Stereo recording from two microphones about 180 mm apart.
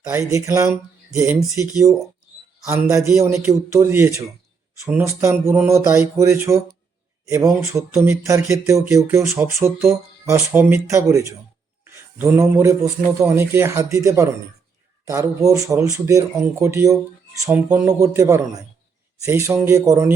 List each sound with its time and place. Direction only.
0.1 s speech: 15° right (ahead or behind)
7.8 s speech: centre (ahead or behind)
8.0 s speech: 15° right (ahead or behind)